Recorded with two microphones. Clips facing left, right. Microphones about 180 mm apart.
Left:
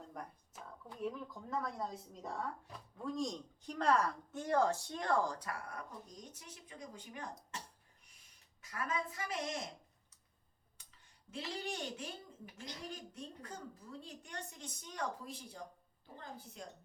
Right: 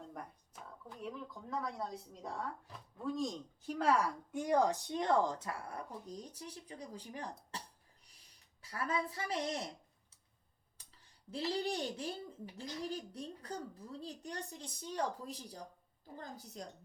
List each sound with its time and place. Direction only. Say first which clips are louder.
0.1 s speech: even; centre (ahead or behind); by 7.6 s 35° right (ahead or behind)
8.6 s speech: right 2 dB; 35° right (ahead or behind)
10.8 s a sound: right 2 dB; 35° right (ahead or behind)
12.5 s speech: right 6 dB; 35° right (ahead or behind)